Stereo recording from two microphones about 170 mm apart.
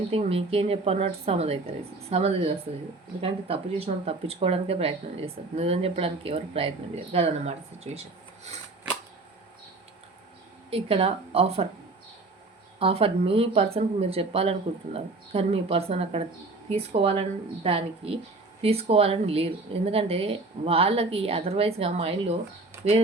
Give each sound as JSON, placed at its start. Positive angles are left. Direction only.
{"t": 0.1, "sound": "speech", "side_deg": -35}
{"t": 10.7, "sound": "speech", "side_deg": -35}
{"t": 12.8, "sound": "speech", "side_deg": -35}